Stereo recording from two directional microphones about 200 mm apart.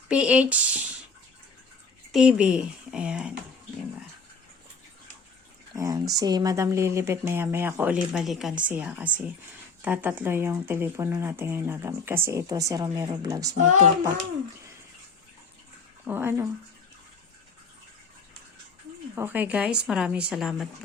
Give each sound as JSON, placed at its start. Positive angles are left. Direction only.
{"t": 0.1, "sound": "speech", "side_deg": -5}
{"t": 2.1, "sound": "speech", "side_deg": -5}
{"t": 5.7, "sound": "speech", "side_deg": -15}
{"t": 16.0, "sound": "speech", "side_deg": -10}
{"t": 19.1, "sound": "speech", "side_deg": -10}